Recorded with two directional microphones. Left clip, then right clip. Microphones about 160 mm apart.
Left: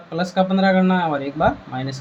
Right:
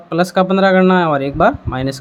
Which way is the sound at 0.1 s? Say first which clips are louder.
Right 6 dB; 50° right (ahead or behind).